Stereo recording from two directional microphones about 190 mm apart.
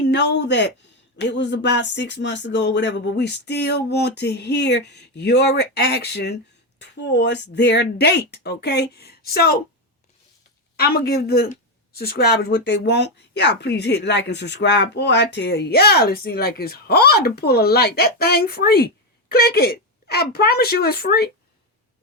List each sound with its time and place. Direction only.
0.0 s speech: 70° left (ahead or behind)
10.8 s speech: 55° left (ahead or behind)